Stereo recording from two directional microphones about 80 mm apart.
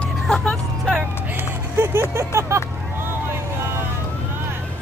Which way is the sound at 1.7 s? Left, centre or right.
Right.